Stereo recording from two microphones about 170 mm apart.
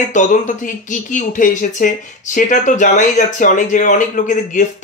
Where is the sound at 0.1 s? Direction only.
50° left (ahead or behind).